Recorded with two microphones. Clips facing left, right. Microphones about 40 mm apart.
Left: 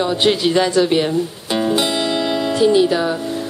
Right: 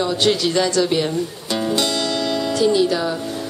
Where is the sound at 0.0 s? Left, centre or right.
Left.